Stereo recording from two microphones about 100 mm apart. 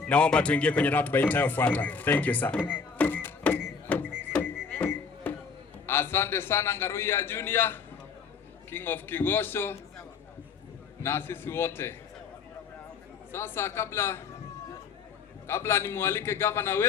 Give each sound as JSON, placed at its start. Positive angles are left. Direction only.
{"t": 0.0, "sound": "a man's voice", "side_deg": 10}
{"t": 2.6, "sound": "a sound", "side_deg": 15}
{"t": 4.2, "sound": "music", "side_deg": 15}
{"t": 5.8, "sound": "a man's voice", "side_deg": 20}
{"t": 11.0, "sound": "a man's voice", "side_deg": 25}
{"t": 13.3, "sound": "a man's voice", "side_deg": 25}
{"t": 15.4, "sound": "a man's voice", "side_deg": 25}